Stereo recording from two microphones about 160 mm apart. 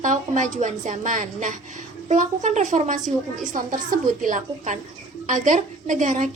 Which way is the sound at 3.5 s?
55° right (ahead or behind).